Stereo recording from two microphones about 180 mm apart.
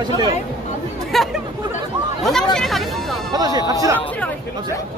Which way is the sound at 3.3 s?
20° right (ahead or behind).